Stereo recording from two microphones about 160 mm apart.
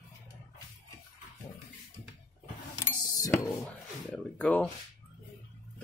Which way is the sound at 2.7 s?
20° left (ahead or behind).